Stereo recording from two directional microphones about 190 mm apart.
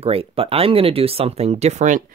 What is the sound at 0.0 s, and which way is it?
Speech, 30° right (ahead or behind).